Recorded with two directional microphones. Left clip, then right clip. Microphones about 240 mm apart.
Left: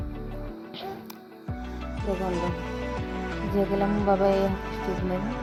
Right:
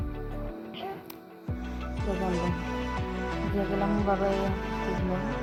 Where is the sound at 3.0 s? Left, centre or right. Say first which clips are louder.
Even; centre.